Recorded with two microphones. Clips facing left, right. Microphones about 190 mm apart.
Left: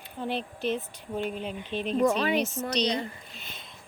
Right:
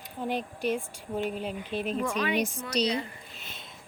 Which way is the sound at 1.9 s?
35° left (ahead or behind).